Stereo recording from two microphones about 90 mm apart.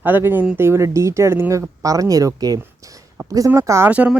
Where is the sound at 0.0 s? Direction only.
20° right (ahead or behind).